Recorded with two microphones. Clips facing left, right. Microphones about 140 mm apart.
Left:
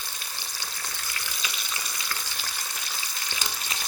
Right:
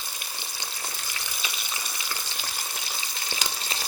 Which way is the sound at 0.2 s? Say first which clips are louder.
Right 1 dB; 15° right (ahead or behind).